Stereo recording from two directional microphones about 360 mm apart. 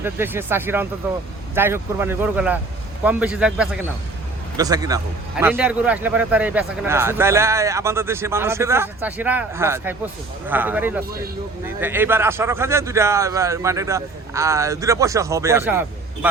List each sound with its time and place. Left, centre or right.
0.0 s a man's voice: centre